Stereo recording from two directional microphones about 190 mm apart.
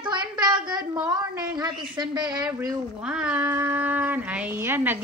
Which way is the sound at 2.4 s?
10° right (ahead or behind).